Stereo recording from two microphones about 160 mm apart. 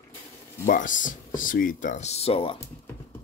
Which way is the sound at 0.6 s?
55° left (ahead or behind).